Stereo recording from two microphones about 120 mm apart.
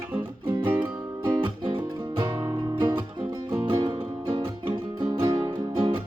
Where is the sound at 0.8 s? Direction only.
40° right (ahead or behind).